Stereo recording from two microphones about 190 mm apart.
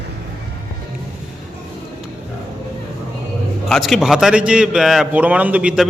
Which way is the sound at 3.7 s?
Centre (ahead or behind).